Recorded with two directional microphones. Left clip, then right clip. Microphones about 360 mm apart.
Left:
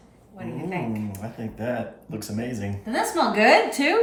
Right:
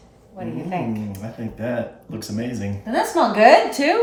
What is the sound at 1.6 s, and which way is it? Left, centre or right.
A woman's voice, centre.